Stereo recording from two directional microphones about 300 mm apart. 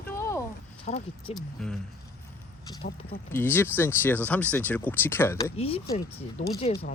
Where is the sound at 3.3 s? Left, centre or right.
Centre.